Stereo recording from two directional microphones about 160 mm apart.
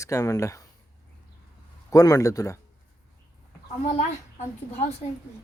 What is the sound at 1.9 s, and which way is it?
Speech, 20° left (ahead or behind).